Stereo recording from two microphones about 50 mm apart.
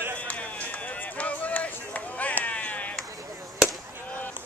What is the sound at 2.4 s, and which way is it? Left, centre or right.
Chop, left.